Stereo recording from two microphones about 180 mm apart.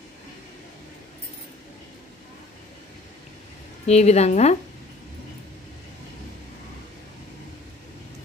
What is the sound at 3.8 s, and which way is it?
Speech, 35° left (ahead or behind).